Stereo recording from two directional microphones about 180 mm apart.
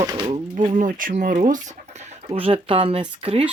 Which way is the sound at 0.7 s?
45° right (ahead or behind).